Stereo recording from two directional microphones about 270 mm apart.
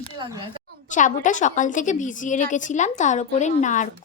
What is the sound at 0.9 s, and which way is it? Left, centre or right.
A woman's voice, left.